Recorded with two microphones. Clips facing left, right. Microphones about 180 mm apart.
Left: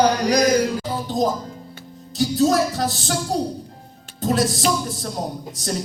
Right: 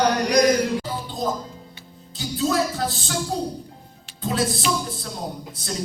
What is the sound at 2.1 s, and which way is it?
Music, 40° left (ahead or behind).